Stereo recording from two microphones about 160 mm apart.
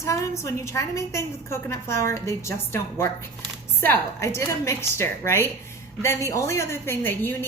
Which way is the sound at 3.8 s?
15° left (ahead or behind).